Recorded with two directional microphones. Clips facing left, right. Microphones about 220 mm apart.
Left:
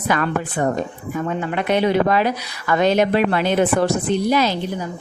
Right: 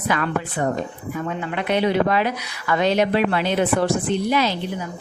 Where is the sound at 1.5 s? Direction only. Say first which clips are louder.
Left 2 dB; 45° left (ahead or behind).